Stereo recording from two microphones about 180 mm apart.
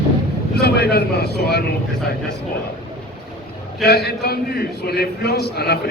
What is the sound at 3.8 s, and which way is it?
A man's voice, 65° left (ahead or behind).